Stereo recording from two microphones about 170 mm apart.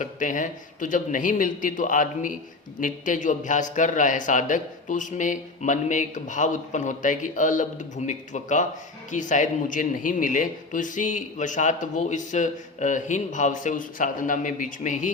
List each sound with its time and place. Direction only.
0.0 s a man's voice: 50° left (ahead or behind)